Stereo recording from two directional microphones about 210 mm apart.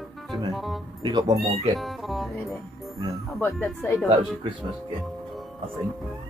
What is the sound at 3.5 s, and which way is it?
Speech, centre (ahead or behind).